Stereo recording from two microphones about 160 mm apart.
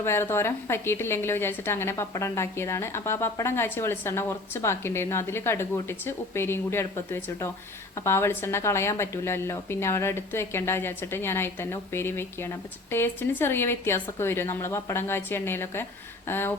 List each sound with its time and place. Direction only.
0.0 s a woman's voice: 15° left (ahead or behind)